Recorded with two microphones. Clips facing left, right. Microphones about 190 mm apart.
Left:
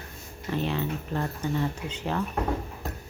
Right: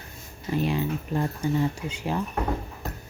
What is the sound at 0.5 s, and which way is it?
Speech, 10° right (ahead or behind).